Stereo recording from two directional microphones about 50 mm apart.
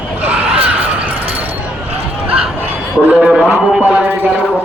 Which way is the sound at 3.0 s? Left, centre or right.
Right.